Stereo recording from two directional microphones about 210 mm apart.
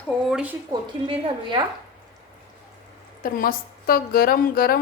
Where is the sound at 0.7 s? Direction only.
25° right (ahead or behind).